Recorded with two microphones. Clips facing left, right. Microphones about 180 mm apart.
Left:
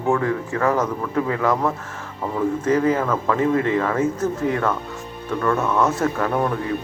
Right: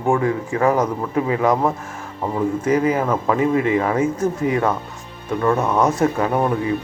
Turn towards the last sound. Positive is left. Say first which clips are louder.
# right 3 dB
turn(degrees=-20)  # may be behind; listen again after turning